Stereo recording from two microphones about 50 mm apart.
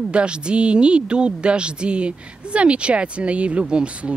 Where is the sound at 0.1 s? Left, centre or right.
Right.